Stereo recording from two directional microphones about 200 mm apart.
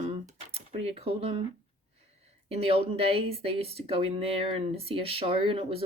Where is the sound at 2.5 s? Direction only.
30° right (ahead or behind).